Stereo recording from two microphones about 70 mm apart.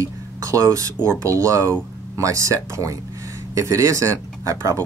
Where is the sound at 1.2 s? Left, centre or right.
Right.